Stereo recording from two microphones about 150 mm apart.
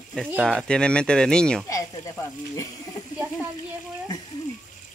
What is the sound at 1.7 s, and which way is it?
Speech, 20° left (ahead or behind).